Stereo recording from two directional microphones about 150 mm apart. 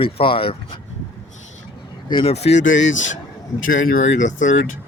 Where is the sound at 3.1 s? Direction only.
65° left (ahead or behind).